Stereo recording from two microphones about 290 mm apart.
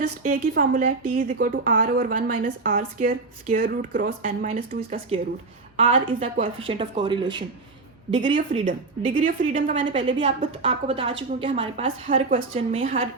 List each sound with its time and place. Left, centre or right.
0.0 s a woman's voice: right